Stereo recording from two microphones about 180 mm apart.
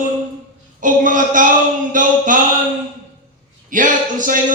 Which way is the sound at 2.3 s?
45° right (ahead or behind).